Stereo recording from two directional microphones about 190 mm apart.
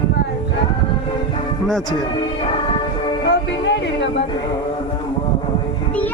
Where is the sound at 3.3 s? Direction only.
65° left (ahead or behind).